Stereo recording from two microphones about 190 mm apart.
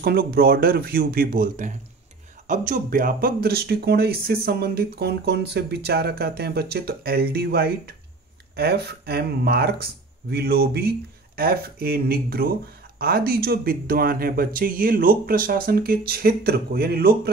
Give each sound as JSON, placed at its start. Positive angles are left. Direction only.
{"t": 0.0, "sound": "speech", "side_deg": -55}